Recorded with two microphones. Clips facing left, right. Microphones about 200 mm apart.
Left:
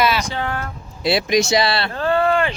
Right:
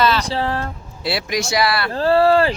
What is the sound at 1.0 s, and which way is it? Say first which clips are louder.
Speech: left 5 dB; 20° left (ahead or behind).